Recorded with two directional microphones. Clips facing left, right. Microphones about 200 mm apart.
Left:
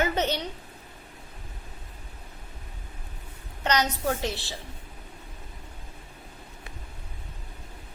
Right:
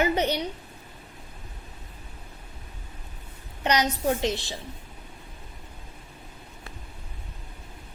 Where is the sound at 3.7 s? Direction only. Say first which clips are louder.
Right 2 dB; 15° right (ahead or behind).